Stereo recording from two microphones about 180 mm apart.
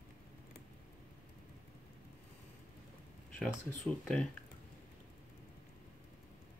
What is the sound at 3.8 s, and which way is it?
Speech, 5° left (ahead or behind).